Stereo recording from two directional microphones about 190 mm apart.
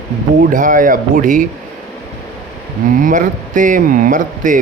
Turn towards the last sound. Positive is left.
turn(degrees=-45)  # may be behind; listen again after turning